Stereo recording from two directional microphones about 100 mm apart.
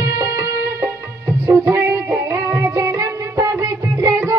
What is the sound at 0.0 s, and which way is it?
Music, 30° right (ahead or behind).